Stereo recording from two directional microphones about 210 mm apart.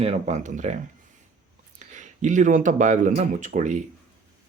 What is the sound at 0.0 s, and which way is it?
Speech, 30° right (ahead or behind).